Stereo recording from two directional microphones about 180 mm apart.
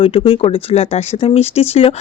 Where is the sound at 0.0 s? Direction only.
30° left (ahead or behind).